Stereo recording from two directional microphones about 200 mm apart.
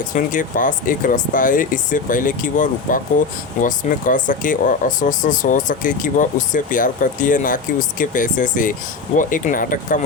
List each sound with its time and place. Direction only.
0.1 s speech: 40° left (ahead or behind)